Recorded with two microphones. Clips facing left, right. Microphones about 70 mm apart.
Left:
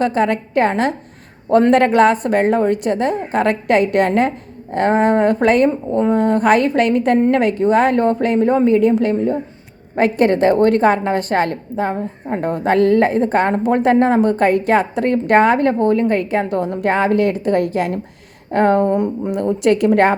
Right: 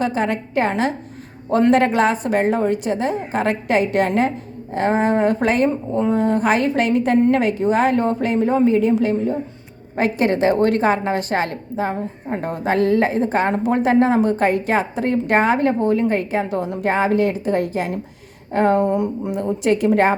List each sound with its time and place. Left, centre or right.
0.0 s a woman's voice: left
19.3 s a woman's voice: left